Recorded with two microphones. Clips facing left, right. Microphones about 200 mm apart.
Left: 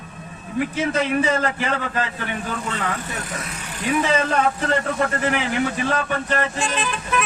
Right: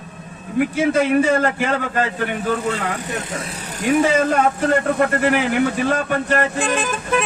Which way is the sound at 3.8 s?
45° right (ahead or behind).